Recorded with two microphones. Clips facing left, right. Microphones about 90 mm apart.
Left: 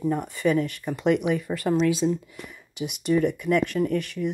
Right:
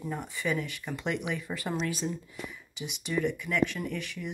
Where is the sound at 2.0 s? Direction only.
40° left (ahead or behind).